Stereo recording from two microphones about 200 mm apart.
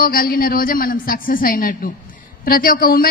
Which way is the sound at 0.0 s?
45° left (ahead or behind).